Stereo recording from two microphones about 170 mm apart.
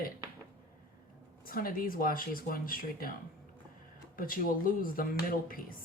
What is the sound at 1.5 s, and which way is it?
Speech, 55° left (ahead or behind).